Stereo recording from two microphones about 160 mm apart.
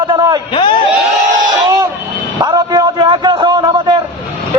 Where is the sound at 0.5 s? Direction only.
30° left (ahead or behind).